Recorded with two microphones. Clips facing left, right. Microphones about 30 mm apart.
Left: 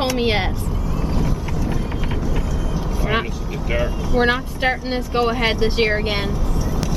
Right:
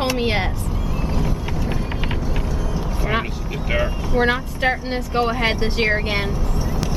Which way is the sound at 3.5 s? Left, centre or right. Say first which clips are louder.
Right 1 dB; right.